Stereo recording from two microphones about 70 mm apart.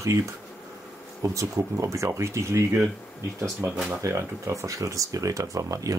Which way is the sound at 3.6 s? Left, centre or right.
Right.